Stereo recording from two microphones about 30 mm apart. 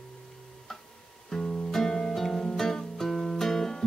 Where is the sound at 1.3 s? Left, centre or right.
Centre.